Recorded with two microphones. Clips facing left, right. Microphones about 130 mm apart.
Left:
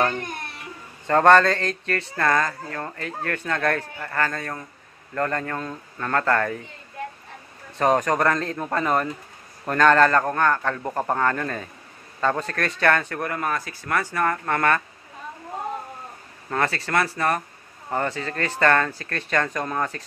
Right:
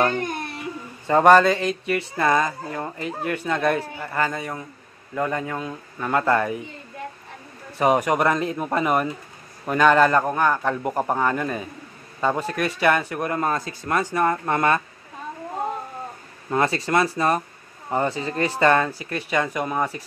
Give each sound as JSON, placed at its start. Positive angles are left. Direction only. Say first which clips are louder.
{"t": 1.0, "sound": "speech", "louder": "right 1 dB", "side_deg": -10}
{"t": 7.7, "sound": "a man's voice", "louder": "right 1 dB", "side_deg": -10}
{"t": 16.4, "sound": "speech", "louder": "right 3 dB", "side_deg": -15}